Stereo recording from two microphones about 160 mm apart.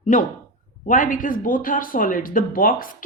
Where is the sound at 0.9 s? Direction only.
55° left (ahead or behind).